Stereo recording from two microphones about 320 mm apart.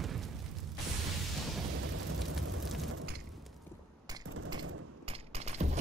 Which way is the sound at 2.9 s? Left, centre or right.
Right.